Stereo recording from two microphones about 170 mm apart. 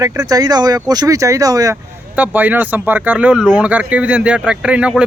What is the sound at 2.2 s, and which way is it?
Speech, 10° right (ahead or behind).